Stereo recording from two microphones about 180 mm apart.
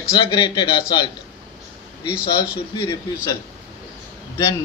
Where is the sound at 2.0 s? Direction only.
5° right (ahead or behind).